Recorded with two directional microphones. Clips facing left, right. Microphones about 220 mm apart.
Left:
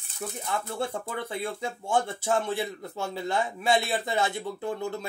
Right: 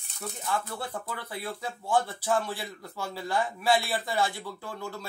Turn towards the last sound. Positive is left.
turn(degrees=20)  # may be behind; listen again after turning